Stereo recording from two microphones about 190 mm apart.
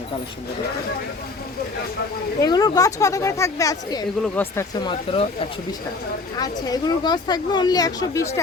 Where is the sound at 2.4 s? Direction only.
20° left (ahead or behind).